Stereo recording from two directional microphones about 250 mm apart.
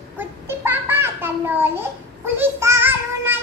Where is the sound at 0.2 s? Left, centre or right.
Centre.